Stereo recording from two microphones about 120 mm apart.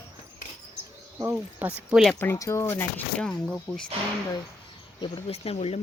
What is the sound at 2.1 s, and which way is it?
Speech, 20° left (ahead or behind).